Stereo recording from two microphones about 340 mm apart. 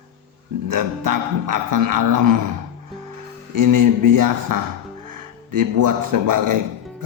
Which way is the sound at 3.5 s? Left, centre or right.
Right.